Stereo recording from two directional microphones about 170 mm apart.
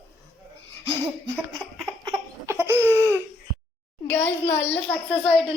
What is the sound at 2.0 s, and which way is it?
Laughter, 20° right (ahead or behind).